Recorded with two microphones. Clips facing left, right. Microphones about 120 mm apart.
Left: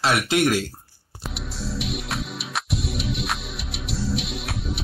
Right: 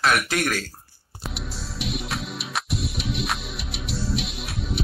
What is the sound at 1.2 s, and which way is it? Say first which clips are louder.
Music: left 2 dB; centre (ahead or behind).